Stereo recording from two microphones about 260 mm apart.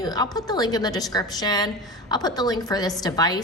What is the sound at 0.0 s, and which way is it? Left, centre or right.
A woman's voice, centre.